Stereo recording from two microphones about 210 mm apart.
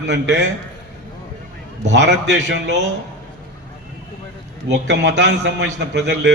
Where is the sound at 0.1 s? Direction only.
55° right (ahead or behind).